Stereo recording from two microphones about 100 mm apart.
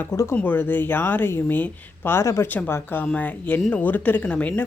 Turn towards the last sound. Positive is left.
turn(degrees=15)  # may be behind; listen again after turning